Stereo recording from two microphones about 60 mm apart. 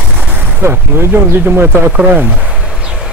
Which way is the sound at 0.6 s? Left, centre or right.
Right.